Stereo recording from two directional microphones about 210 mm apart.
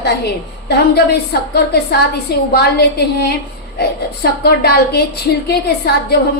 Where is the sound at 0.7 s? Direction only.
50° left (ahead or behind).